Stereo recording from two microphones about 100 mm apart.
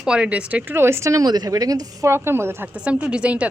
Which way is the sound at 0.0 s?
10° right (ahead or behind).